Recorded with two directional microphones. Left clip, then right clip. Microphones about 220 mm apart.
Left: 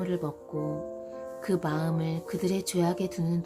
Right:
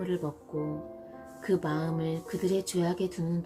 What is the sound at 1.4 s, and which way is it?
Speech, 25° left (ahead or behind).